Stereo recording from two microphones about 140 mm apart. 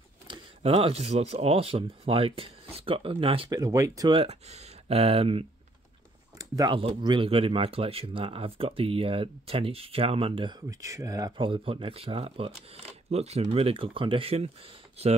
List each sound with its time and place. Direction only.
0.6 s speech: 45° right (ahead or behind)
3.5 s speech: 25° right (ahead or behind)
4.1 s speech: 45° right (ahead or behind)
6.3 s a sound: 25° right (ahead or behind)
6.8 s speech: 35° right (ahead or behind)
10.7 s speech: 25° right (ahead or behind); by 14.5 s 45° right (ahead or behind)